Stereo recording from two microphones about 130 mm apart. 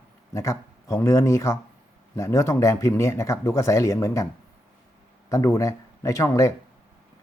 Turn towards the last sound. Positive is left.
turn(degrees=25)  # may be behind; listen again after turning